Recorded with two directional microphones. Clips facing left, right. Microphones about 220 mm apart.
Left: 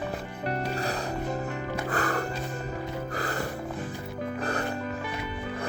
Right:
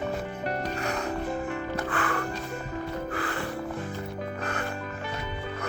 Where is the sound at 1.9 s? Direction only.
40° left (ahead or behind).